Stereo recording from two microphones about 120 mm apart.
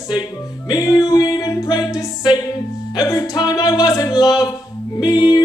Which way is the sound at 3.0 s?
30° left (ahead or behind).